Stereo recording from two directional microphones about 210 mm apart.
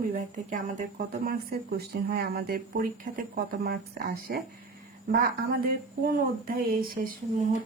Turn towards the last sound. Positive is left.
turn(degrees=-45)  # may be behind; listen again after turning